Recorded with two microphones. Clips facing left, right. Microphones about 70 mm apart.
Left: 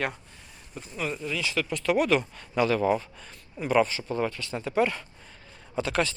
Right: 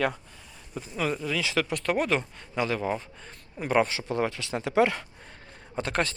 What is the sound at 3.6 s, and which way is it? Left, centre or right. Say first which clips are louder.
Speech: left 1 dB; right.